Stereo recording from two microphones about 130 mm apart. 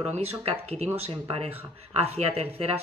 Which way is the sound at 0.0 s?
55° right (ahead or behind).